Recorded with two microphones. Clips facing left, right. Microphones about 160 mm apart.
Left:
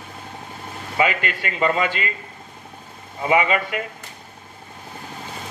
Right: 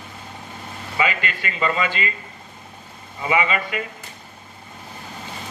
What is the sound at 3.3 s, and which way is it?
Speech, 55° left (ahead or behind).